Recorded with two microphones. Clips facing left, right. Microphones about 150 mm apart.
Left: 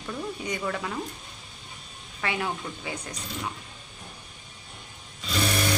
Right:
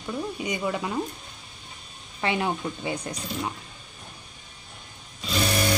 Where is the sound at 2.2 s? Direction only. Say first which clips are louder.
Right 4 dB; 25° right (ahead or behind).